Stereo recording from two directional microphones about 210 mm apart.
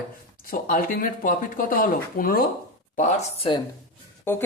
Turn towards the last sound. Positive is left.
turn(degrees=10)  # may be behind; listen again after turning